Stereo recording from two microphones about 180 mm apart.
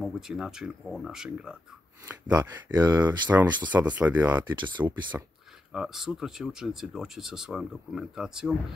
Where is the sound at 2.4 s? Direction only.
20° right (ahead or behind).